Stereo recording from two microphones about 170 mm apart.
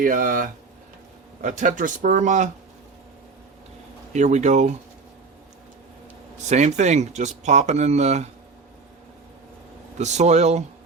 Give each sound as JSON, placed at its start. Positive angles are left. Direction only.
{"t": 0.0, "sound": "speech", "side_deg": -55}
{"t": 4.1, "sound": "speech", "side_deg": -45}
{"t": 6.4, "sound": "speech", "side_deg": -45}
{"t": 10.0, "sound": "speech", "side_deg": -40}